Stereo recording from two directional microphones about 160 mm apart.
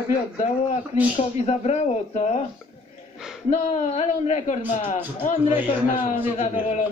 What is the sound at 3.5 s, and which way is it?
Speech, 45° left (ahead or behind).